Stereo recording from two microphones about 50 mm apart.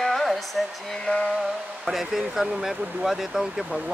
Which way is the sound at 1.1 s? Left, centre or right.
Left.